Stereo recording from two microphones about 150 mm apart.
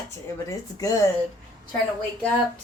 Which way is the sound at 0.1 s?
20° left (ahead or behind).